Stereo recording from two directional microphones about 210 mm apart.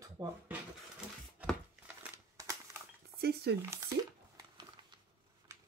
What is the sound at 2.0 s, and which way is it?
Crumpling, 15° right (ahead or behind).